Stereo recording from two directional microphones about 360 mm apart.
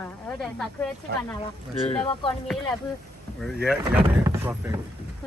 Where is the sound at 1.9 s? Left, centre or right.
Centre.